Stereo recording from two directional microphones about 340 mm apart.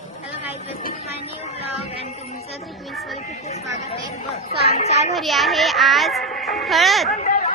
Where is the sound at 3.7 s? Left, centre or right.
Centre.